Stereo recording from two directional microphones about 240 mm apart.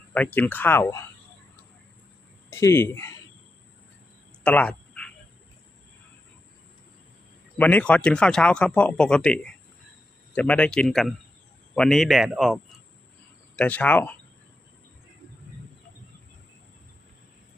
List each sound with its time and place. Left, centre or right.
0.1 s speech: centre
2.5 s speech: centre
4.4 s a sound: centre
7.6 s speech: centre